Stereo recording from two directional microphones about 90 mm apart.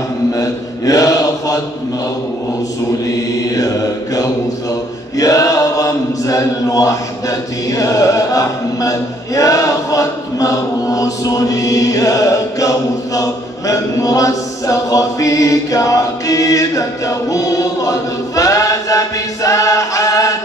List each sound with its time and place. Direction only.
0.3 s mantra: 40° left (ahead or behind)
3.4 s chant: 40° left (ahead or behind)